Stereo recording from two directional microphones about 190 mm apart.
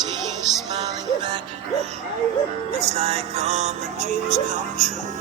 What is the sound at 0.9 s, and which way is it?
Music, 25° right (ahead or behind).